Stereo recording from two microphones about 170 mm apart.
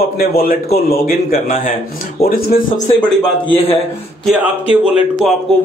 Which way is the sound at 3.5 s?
35° left (ahead or behind).